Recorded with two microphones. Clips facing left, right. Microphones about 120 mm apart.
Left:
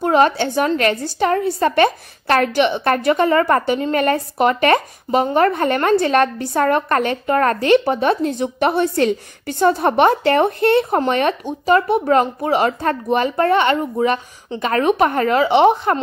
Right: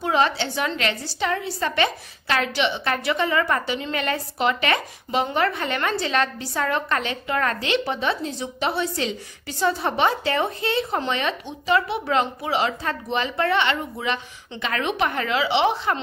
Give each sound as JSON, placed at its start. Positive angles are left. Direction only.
{"t": 0.0, "sound": "a woman's voice", "side_deg": 45}